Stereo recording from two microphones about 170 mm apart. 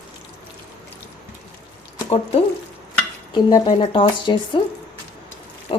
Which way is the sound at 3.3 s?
30° left (ahead or behind).